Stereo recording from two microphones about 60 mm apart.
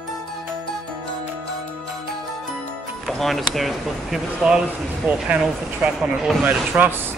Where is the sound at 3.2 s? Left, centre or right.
Centre.